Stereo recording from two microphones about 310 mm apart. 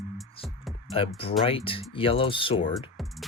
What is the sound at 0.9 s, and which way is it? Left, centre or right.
Speech, centre.